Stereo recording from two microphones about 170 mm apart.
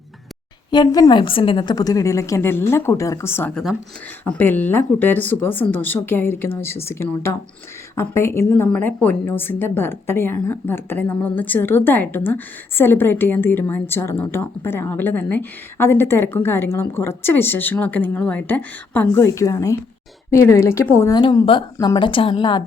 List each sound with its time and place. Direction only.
0.7 s a woman's voice: 25° left (ahead or behind)
21.2 s a woman's voice: 25° left (ahead or behind)